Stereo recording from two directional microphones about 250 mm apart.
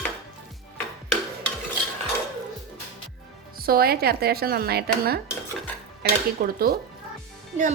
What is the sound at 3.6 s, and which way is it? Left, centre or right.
A woman's voice, right.